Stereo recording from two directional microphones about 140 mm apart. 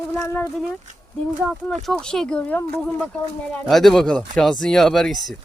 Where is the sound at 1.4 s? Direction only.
Centre (ahead or behind).